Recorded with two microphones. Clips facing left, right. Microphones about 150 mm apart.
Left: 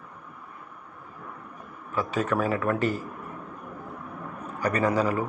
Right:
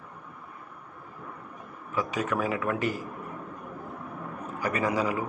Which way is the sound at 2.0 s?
15° right (ahead or behind).